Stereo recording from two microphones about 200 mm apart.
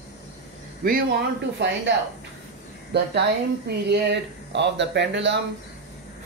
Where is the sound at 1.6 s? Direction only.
65° right (ahead or behind).